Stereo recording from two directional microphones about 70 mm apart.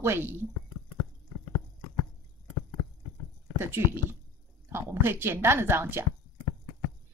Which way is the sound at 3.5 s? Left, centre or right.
Right.